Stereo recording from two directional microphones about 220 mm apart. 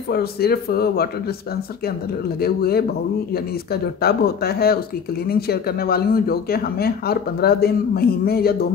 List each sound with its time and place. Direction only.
0.1 s speech: 45° left (ahead or behind)
2.4 s speech: 45° left (ahead or behind)